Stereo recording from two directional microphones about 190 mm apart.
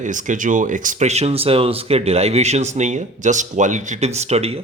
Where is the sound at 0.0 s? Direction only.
40° right (ahead or behind).